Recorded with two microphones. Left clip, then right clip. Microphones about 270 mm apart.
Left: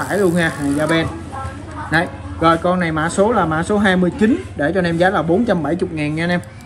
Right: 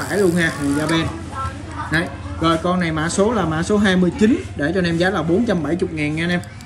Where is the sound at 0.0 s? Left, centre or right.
Centre.